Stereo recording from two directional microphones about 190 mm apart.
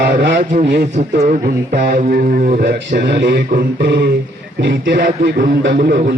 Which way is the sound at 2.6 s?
60° right (ahead or behind).